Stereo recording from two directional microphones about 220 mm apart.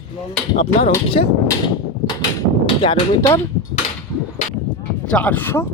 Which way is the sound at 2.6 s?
20° left (ahead or behind).